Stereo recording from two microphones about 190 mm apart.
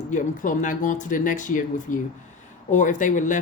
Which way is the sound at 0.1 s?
40° left (ahead or behind).